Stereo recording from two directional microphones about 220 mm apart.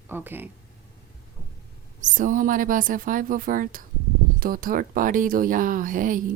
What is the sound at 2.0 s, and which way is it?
Speech, 35° right (ahead or behind).